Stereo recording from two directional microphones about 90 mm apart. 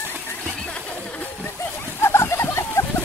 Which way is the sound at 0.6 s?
15° left (ahead or behind).